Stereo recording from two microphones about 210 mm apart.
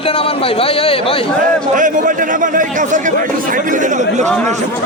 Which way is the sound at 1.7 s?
40° right (ahead or behind).